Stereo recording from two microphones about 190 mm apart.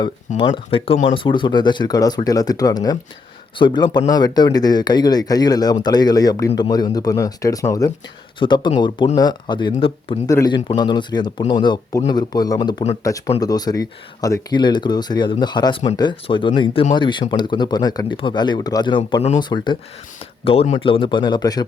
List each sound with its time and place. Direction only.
0.3 s speech: 25° left (ahead or behind)